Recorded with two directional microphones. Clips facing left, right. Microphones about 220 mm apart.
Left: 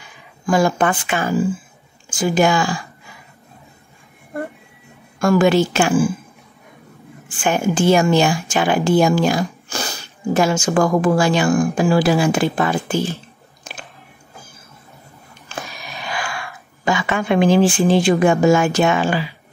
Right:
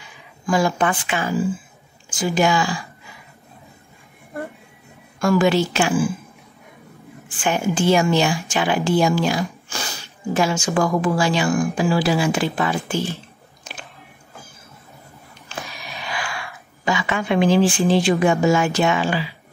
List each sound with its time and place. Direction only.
0.5 s a woman's voice: 50° left (ahead or behind)
5.2 s a woman's voice: 50° left (ahead or behind)
7.4 s a woman's voice: 45° left (ahead or behind)
16.0 s speech: 45° left (ahead or behind)